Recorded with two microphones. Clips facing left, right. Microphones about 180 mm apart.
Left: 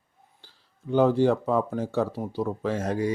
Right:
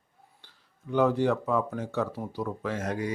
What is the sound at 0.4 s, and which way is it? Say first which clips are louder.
Speech: left 6 dB; 30° left (ahead or behind).